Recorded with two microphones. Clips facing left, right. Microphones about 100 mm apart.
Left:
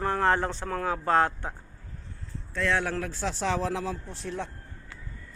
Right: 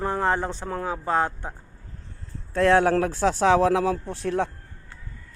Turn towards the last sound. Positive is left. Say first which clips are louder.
# right 9 dB
turn(degrees=-60)  # may be behind; listen again after turning